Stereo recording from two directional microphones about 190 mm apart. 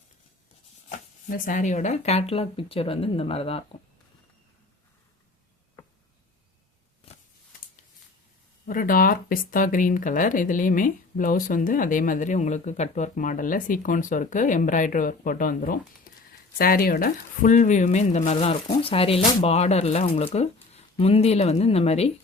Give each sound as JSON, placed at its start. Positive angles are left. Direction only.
{"t": 0.9, "sound": "speech", "side_deg": 45}
{"t": 8.6, "sound": "speech", "side_deg": 45}
{"t": 16.1, "sound": "a sound", "side_deg": 50}
{"t": 16.6, "sound": "speech", "side_deg": 50}